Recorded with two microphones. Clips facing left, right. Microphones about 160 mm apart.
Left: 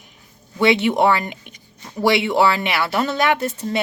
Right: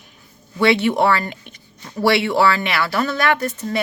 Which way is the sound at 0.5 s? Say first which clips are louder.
Even; 20° left (ahead or behind).